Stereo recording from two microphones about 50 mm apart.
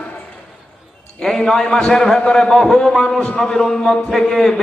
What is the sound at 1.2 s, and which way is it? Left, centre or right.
A man's voice, centre.